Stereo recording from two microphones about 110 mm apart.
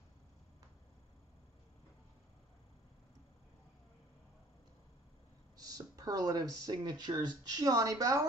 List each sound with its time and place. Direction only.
5.6 s speech: 35° right (ahead or behind)